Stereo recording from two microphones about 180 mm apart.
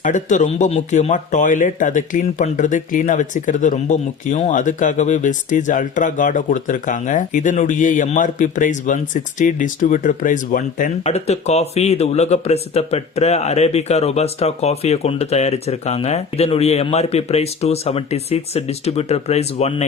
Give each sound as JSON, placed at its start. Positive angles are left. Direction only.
{"t": 0.0, "sound": "speech", "side_deg": 45}